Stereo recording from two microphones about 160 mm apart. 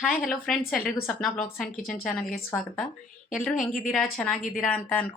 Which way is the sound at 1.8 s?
65° left (ahead or behind).